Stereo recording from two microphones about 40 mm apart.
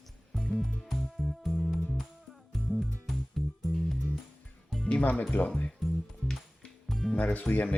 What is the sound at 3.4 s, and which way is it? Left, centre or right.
Music, centre.